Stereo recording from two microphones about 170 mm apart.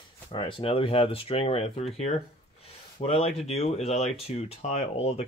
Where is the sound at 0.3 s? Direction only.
30° left (ahead or behind).